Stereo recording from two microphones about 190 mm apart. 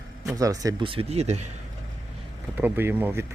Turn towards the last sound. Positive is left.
turn(degrees=-10)  # may be behind; listen again after turning